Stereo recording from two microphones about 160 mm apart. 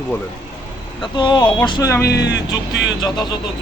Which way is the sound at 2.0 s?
90° left.